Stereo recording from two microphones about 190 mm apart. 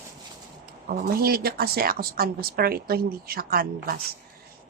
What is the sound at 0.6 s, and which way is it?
Speech, 50° right (ahead or behind).